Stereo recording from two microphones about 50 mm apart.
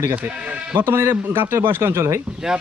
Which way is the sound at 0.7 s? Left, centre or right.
Right.